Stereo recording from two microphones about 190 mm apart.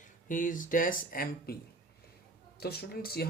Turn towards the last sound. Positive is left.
turn(degrees=55)  # may be behind; listen again after turning